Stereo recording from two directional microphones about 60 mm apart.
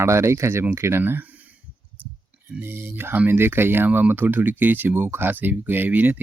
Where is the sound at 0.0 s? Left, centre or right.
Right.